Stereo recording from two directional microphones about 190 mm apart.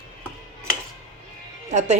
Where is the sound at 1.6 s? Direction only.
35° right (ahead or behind).